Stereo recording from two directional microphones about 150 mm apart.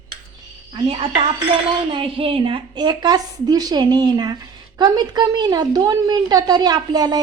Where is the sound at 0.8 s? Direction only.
35° right (ahead or behind).